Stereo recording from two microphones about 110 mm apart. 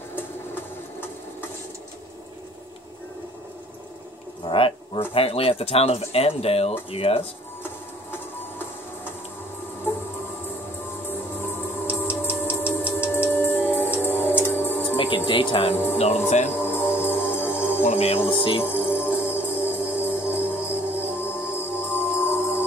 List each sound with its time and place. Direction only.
4.5 s insect: 55° left (ahead or behind)
5.1 s speech: 60° left (ahead or behind)
9.9 s music: 20° left (ahead or behind)
11.1 s music: 20° left (ahead or behind)
15.0 s speech: 50° left (ahead or behind)
16.3 s speech: 90° left
16.5 s music: 20° left (ahead or behind)
17.8 s music: 70° left (ahead or behind)
18.3 s music: 50° left (ahead or behind)
18.6 s music: 20° left (ahead or behind)